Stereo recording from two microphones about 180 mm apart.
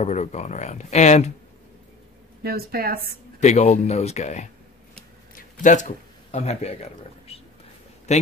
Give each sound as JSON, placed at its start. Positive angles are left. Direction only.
{"t": 0.0, "sound": "speech", "side_deg": 40}
{"t": 2.4, "sound": "speech", "side_deg": -55}
{"t": 3.3, "sound": "a man's voice", "side_deg": 40}